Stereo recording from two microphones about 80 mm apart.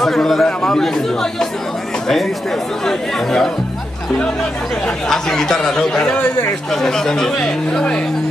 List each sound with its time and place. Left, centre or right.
0.0 s speech: centre
2.8 s speech: centre
4.8 s speech: centre
6.1 s speech: left
6.7 s speech: centre